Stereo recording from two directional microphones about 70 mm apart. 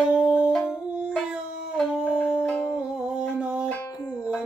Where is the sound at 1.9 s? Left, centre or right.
Centre.